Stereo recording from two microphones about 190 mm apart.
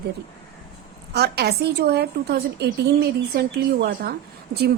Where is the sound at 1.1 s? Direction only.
60° right (ahead or behind).